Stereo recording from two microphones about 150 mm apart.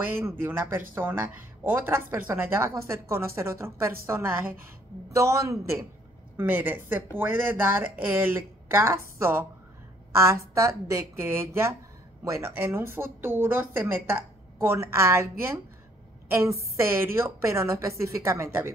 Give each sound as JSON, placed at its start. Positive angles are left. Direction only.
{"t": 0.1, "sound": "a woman's voice", "side_deg": -15}